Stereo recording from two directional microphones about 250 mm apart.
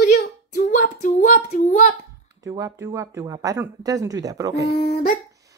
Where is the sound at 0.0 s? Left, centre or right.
Left.